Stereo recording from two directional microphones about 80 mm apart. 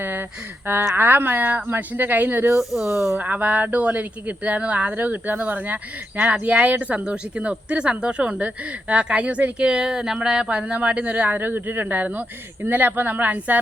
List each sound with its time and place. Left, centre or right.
0.0 s a sound: right
0.9 s speech: right
2.6 s speech: centre
3.2 s speech: right